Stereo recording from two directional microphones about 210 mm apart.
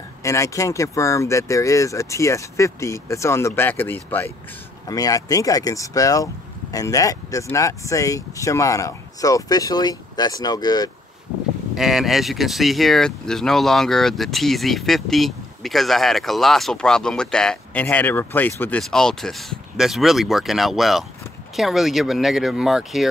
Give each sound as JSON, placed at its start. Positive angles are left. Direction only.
{"t": 0.2, "sound": "speech", "side_deg": 15}
{"t": 11.7, "sound": "speech", "side_deg": 0}